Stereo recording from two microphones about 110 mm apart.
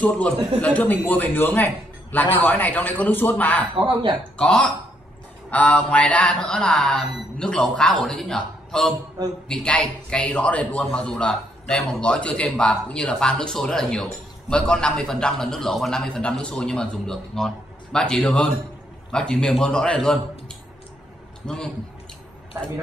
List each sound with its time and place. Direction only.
0.6 s a man's voice: 15° left (ahead or behind)
3.8 s speech: 45° right (ahead or behind)
4.4 s a man's voice: 10° left (ahead or behind)
21.4 s a man's voice: 5° left (ahead or behind)